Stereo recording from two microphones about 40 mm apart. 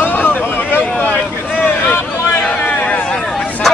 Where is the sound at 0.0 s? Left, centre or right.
Left.